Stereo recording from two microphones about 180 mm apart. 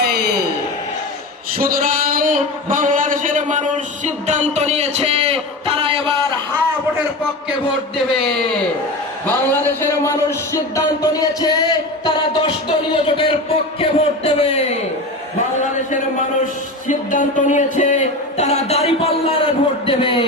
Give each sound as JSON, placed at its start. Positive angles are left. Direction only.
{"t": 0.0, "sound": "a sound", "side_deg": -60}
{"t": 1.5, "sound": "a man's voice", "side_deg": -50}
{"t": 8.2, "sound": "a man's voice", "side_deg": 5}
{"t": 16.9, "sound": "speech", "side_deg": 45}